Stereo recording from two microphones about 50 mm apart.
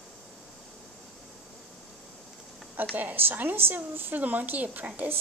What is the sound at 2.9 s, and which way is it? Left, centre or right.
Speech, right.